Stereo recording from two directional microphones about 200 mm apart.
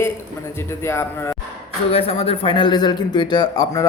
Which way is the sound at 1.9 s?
30° left (ahead or behind).